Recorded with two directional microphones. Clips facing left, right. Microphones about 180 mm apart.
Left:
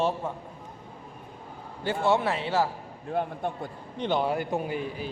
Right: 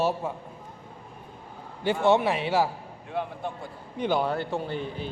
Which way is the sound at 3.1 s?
50° left (ahead or behind).